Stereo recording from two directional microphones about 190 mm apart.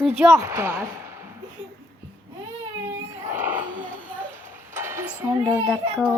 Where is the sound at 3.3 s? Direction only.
10° right (ahead or behind).